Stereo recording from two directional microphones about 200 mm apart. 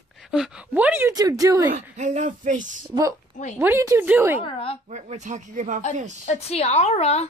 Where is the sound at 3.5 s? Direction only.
10° right (ahead or behind).